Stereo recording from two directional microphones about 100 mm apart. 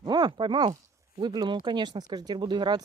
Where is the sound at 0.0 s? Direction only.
50° right (ahead or behind).